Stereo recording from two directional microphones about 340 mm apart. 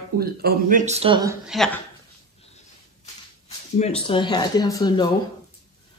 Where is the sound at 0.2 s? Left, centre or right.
Right; by 1.8 s centre.